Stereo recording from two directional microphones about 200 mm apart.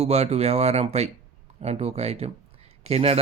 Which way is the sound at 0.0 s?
30° right (ahead or behind).